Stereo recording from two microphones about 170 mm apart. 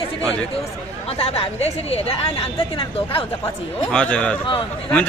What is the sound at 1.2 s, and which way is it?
A woman's voice, 40° left (ahead or behind).